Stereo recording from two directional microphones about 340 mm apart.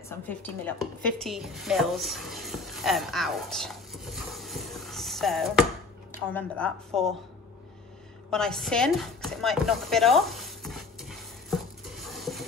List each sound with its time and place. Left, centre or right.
0.3 s a woman's voice: centre
8.3 s chopping: centre